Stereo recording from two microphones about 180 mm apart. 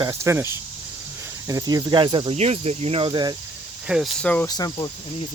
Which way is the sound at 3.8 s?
5° right (ahead or behind).